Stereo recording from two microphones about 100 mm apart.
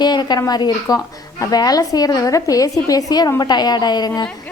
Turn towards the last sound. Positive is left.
turn(degrees=45)  # may be behind; listen again after turning